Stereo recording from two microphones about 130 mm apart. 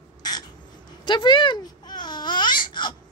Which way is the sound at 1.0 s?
35° left (ahead or behind).